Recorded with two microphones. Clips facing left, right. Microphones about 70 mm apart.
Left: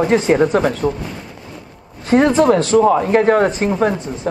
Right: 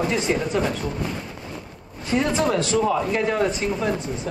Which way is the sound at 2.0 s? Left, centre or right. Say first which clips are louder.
Left 9 dB; left.